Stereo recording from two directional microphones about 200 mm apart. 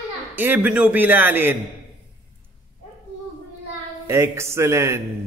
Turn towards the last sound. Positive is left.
turn(degrees=-15)  # may be behind; listen again after turning